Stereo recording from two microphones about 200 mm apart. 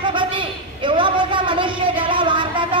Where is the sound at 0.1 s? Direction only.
25° right (ahead or behind).